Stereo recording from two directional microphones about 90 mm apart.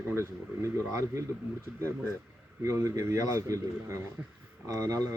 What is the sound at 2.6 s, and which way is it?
Speech, 35° right (ahead or behind).